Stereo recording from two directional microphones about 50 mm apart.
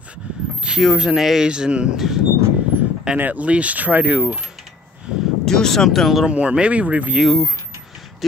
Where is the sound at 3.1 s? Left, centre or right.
Right.